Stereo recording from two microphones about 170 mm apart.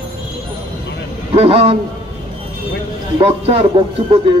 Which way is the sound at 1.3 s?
35° right (ahead or behind).